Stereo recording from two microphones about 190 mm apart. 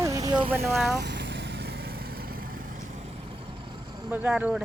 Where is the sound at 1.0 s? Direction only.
65° right (ahead or behind).